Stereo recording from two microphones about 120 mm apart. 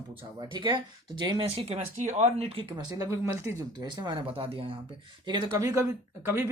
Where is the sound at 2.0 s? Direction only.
80° right; by 2.7 s 55° right (ahead or behind).